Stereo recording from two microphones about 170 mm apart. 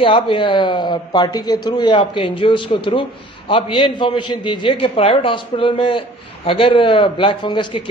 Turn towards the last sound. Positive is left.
turn(degrees=30)  # may be behind; listen again after turning